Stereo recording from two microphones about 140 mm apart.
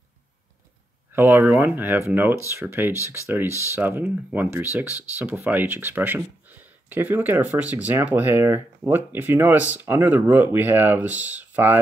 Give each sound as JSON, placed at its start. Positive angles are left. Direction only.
{"t": 1.1, "sound": "speech", "side_deg": -15}